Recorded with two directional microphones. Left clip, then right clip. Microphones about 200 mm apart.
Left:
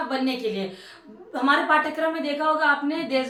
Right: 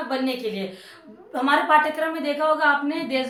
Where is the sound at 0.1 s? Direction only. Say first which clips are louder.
Even; 10° right (ahead or behind).